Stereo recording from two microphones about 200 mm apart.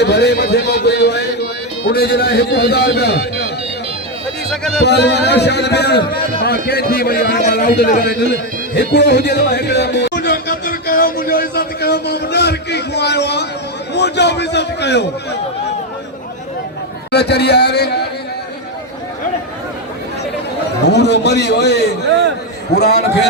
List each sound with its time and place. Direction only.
0.0 s a man's voice: 55° left (ahead or behind)
4.5 s speech: centre (ahead or behind)
4.9 s a man's voice: 60° left (ahead or behind)
8.7 s a sound: 60° left (ahead or behind)
13.9 s a man's voice: 60° left (ahead or behind)
17.1 s a man's voice: 55° left (ahead or behind)
20.8 s a man's voice: 55° left (ahead or behind)